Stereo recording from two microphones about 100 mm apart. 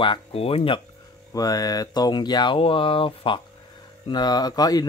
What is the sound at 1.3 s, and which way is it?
Speech, 35° left (ahead or behind).